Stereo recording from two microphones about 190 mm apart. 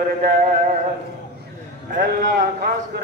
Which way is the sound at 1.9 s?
45° right (ahead or behind).